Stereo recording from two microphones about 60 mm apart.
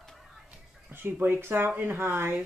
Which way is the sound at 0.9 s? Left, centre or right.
Right.